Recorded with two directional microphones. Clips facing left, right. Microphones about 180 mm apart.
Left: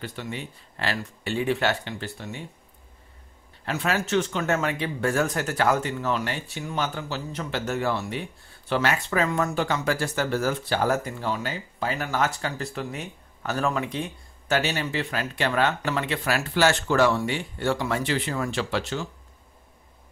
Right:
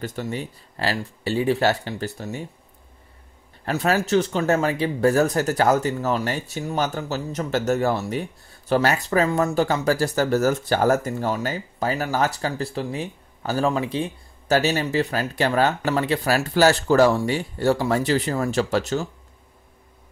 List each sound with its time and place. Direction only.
0.0 s speech: 40° right (ahead or behind)
3.6 s speech: 40° right (ahead or behind)